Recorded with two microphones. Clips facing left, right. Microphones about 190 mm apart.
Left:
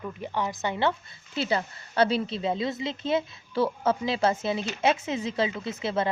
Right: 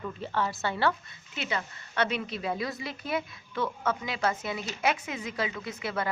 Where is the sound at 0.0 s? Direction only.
15° left (ahead or behind).